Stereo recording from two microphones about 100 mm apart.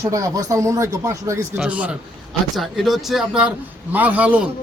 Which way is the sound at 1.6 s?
15° right (ahead or behind).